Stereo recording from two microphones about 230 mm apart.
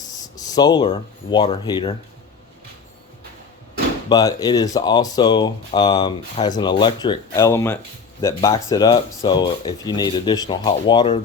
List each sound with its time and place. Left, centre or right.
0.0 s a sound: centre
1.3 s speech: centre
4.1 s speech: centre